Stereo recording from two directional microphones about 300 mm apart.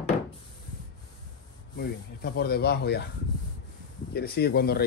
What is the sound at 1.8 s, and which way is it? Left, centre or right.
Speech, left.